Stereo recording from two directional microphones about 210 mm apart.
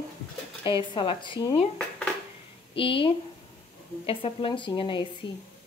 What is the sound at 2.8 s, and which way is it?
A woman's voice, 25° left (ahead or behind).